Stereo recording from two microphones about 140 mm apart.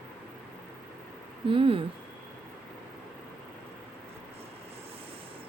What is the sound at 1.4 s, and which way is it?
Speech, 40° right (ahead or behind).